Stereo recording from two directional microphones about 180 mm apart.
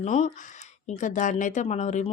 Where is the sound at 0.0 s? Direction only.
40° left (ahead or behind).